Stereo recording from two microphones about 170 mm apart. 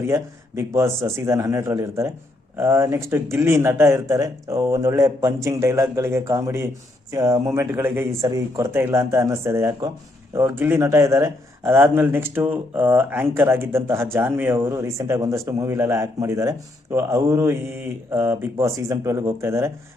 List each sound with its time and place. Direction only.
0.1 s speech: 15° right (ahead or behind)